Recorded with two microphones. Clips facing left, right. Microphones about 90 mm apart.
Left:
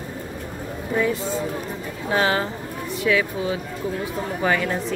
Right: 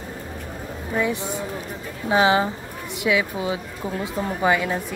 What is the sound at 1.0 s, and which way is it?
A woman's voice, 20° right (ahead or behind).